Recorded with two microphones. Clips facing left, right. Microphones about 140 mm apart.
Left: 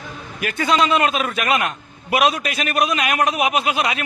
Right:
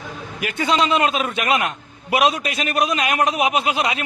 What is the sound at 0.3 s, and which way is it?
A man's voice, 20° right (ahead or behind).